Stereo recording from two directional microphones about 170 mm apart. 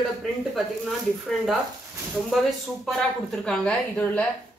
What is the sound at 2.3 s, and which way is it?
Speech, centre (ahead or behind).